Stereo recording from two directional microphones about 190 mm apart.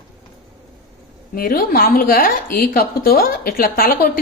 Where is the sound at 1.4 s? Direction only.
50° left (ahead or behind).